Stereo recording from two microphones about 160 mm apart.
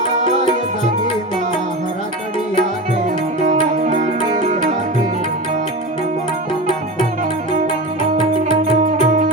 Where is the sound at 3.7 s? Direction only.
45° right (ahead or behind).